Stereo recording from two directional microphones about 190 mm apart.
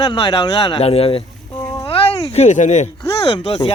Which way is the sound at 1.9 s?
35° left (ahead or behind).